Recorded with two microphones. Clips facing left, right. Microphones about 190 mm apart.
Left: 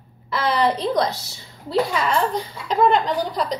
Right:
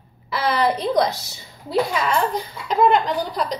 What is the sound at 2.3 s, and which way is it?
A woman's voice, 5° right (ahead or behind).